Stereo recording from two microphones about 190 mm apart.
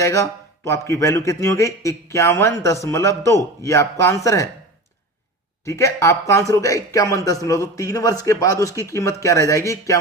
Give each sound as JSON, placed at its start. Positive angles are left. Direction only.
{"t": 0.0, "sound": "a man's voice", "side_deg": 15}
{"t": 5.6, "sound": "a man's voice", "side_deg": 15}